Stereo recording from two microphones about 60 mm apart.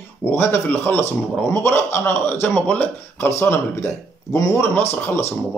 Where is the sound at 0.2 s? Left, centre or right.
Left.